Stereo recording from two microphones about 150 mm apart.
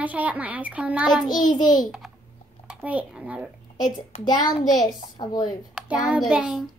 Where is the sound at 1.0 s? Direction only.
30° left (ahead or behind).